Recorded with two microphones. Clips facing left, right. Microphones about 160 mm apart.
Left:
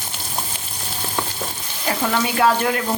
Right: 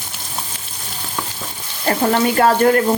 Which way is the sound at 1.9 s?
45° right (ahead or behind).